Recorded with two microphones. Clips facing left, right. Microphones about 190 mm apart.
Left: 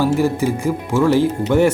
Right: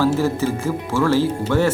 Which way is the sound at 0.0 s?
15° left (ahead or behind).